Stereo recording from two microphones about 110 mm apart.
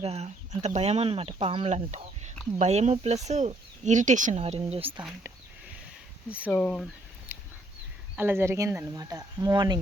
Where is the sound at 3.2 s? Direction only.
90° right; by 5.0 s 60° right (ahead or behind).